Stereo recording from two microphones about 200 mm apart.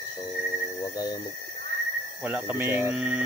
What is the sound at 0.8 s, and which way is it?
Speech, 20° left (ahead or behind).